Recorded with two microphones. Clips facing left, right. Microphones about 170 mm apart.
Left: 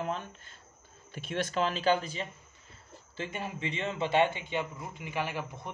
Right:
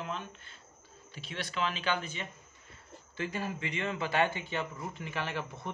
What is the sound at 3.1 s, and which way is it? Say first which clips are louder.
Speech: right 1 dB; 25° left (ahead or behind).